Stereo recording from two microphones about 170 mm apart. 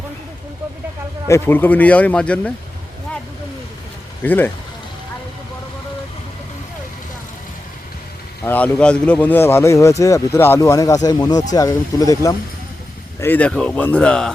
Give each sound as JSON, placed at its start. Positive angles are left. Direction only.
{"t": 1.3, "sound": "speech", "side_deg": 10}
{"t": 4.2, "sound": "speech", "side_deg": 10}
{"t": 8.4, "sound": "speech", "side_deg": 10}